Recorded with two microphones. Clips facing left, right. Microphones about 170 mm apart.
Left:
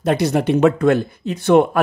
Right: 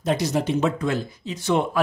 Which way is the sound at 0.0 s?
60° left (ahead or behind).